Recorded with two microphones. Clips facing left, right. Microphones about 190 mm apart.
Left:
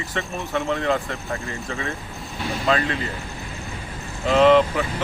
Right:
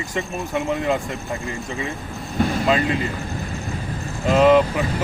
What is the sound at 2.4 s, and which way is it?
Vehicle, 50° right (ahead or behind).